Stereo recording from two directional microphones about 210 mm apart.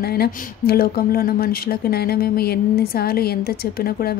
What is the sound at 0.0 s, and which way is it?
Speech, 50° left (ahead or behind).